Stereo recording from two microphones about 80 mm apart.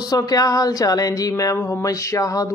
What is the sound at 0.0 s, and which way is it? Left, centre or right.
Speech, left.